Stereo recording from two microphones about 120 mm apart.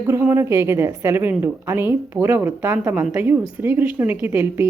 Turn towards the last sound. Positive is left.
turn(degrees=-20)  # may be behind; listen again after turning